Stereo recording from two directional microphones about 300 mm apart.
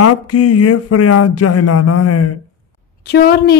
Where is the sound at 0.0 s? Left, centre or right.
Left.